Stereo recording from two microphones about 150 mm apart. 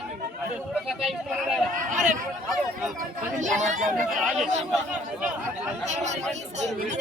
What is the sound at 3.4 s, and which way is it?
Speech, 55° right (ahead or behind).